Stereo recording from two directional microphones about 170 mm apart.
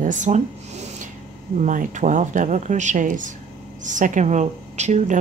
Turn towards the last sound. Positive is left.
turn(degrees=-45)  # may be behind; listen again after turning